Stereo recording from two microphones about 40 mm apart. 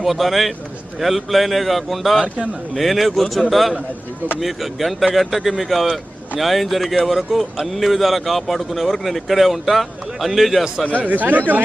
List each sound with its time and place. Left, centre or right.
0.0 s speech: centre
10.9 s speech: right